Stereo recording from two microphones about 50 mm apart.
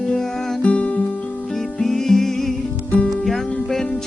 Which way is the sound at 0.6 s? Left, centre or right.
Left.